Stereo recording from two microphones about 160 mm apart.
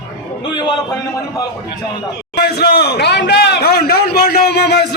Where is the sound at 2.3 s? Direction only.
85° left.